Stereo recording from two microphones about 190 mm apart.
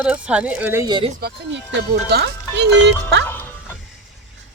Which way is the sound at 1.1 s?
60° right (ahead or behind).